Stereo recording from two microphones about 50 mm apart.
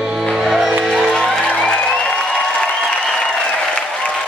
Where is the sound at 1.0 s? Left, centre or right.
Centre.